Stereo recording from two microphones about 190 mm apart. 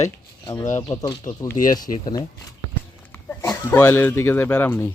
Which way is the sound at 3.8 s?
10° left (ahead or behind).